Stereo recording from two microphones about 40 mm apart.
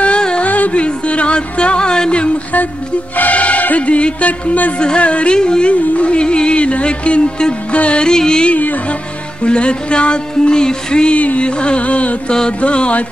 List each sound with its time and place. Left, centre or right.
0.4 s music: left
3.2 s music: left
4.7 s music: left
8.0 s music: centre
11.1 s music: left
12.3 s music: left